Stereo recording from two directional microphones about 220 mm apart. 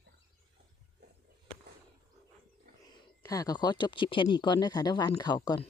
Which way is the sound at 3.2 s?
15° left (ahead or behind).